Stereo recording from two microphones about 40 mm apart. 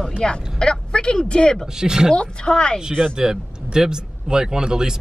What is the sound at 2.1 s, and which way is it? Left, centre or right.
Speech, left.